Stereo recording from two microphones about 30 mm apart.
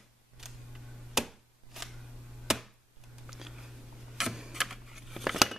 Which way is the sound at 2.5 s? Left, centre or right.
Centre.